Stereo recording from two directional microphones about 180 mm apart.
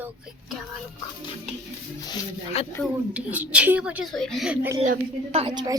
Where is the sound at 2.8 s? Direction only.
5° right (ahead or behind).